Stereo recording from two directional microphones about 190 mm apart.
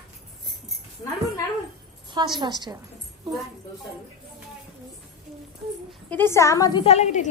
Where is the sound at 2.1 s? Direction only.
25° right (ahead or behind).